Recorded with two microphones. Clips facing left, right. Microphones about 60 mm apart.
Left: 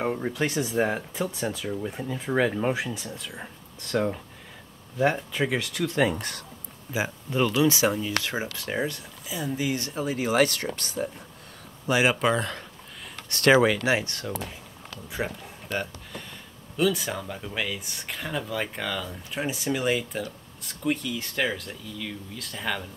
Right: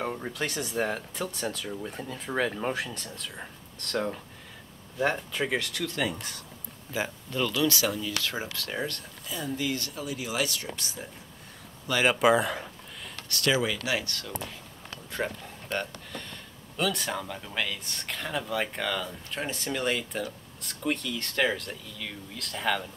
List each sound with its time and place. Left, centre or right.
0.0 s speech: centre
5.9 s speech: left
6.1 s speech: left
6.9 s speech: centre
10.0 s speech: left
11.9 s speech: centre
12.2 s speech: centre
13.4 s speech: left
13.7 s speech: left
15.0 s speech: centre